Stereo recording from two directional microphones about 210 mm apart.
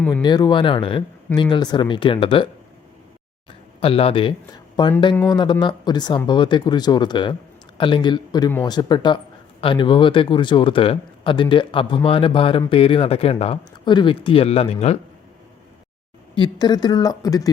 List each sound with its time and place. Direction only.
0.1 s speech: 20° left (ahead or behind)
3.8 s speech: 25° left (ahead or behind)
16.3 s speech: 20° left (ahead or behind)